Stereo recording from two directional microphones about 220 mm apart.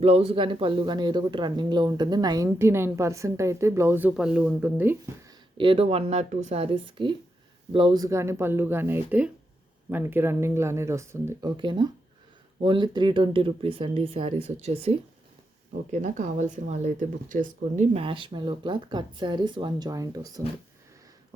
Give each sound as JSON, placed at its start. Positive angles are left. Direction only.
{"t": 0.0, "sound": "speech", "side_deg": -25}
{"t": 5.5, "sound": "speech", "side_deg": -25}